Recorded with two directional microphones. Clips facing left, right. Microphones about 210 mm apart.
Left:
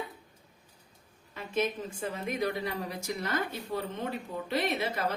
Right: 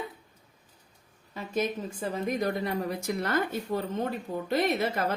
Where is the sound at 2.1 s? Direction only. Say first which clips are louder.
Right 3 dB; 45° right (ahead or behind).